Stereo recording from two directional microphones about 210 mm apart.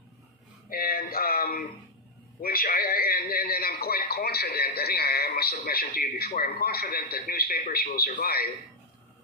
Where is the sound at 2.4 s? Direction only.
45° left (ahead or behind).